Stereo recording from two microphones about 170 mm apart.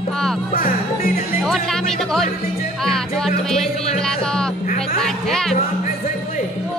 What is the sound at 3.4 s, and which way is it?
Speech, centre (ahead or behind).